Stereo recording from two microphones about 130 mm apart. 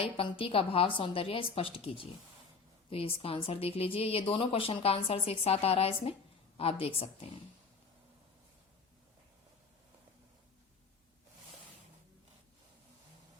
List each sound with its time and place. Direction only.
0.0 s speech: 45° left (ahead or behind)